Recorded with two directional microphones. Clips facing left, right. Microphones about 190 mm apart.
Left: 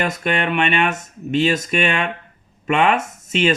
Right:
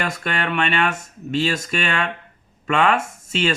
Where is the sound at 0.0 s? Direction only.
20° left (ahead or behind).